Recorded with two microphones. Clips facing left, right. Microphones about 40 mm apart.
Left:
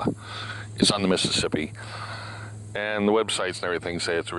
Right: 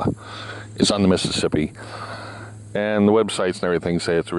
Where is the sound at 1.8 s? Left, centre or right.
Centre.